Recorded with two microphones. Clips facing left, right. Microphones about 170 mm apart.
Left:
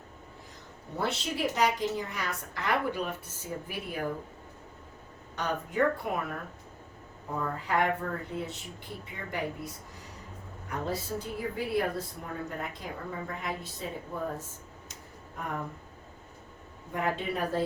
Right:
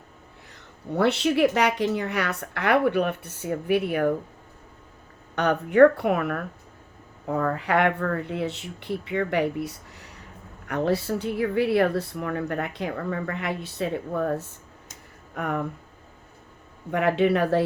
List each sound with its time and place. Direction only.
0.9 s a woman's voice: 70° right (ahead or behind)
5.3 s a woman's voice: 70° right (ahead or behind)
16.9 s a woman's voice: 75° right (ahead or behind)